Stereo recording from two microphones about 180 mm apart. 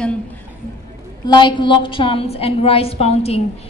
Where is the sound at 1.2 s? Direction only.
25° left (ahead or behind).